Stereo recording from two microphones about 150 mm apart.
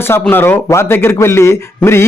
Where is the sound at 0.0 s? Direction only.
15° left (ahead or behind).